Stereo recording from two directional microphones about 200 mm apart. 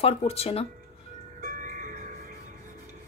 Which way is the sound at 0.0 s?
30° left (ahead or behind).